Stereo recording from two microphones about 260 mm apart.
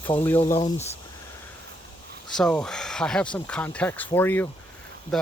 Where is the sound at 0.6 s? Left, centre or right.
Left.